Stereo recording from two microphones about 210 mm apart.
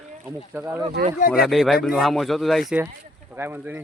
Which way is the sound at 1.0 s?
50° right (ahead or behind).